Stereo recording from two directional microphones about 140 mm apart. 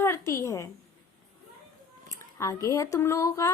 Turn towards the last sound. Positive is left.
turn(degrees=20)  # may be behind; listen again after turning